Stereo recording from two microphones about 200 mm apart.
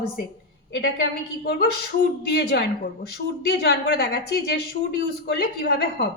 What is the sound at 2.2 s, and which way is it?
A woman's voice, 55° left (ahead or behind).